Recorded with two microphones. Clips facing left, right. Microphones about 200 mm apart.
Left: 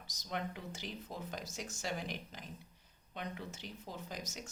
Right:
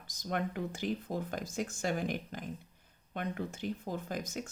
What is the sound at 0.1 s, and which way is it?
Speech, 55° right (ahead or behind).